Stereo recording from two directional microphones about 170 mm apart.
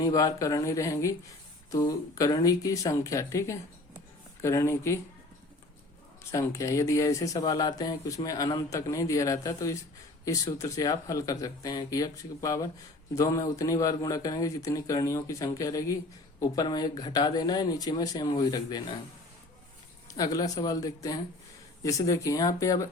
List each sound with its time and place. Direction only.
0.0 s speech: 20° left (ahead or behind)
6.3 s speech: 15° left (ahead or behind)
20.1 s speech: 20° left (ahead or behind)